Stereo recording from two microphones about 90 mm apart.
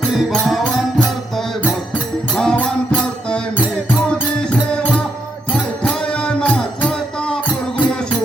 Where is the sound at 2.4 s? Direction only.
10° left (ahead or behind).